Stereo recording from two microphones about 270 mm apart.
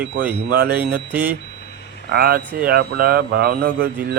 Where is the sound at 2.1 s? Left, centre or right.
Right.